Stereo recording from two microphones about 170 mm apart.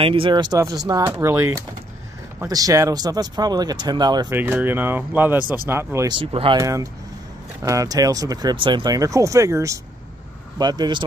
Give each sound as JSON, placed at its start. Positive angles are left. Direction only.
{"t": 0.0, "sound": "speech", "side_deg": -30}
{"t": 4.3, "sound": "speech", "side_deg": -10}
{"t": 6.1, "sound": "speech", "side_deg": -30}
{"t": 6.6, "sound": "speech", "side_deg": -20}